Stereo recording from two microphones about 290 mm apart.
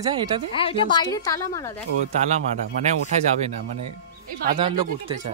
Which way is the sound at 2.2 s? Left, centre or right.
Right.